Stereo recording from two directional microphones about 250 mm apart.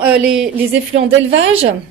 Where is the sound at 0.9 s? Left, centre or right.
Right.